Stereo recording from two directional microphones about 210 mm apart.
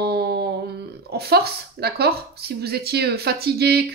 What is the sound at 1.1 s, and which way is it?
Speech, 50° right (ahead or behind).